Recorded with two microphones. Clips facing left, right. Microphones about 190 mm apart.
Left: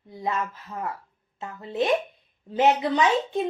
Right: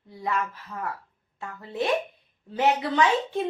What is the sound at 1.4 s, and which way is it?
A woman's voice, 20° left (ahead or behind).